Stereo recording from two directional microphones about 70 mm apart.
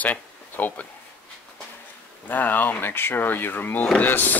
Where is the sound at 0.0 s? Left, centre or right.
Left.